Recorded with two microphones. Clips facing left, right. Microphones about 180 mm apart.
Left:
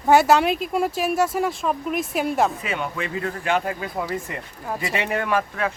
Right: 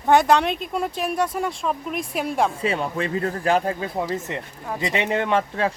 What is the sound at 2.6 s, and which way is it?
Speech, 30° right (ahead or behind).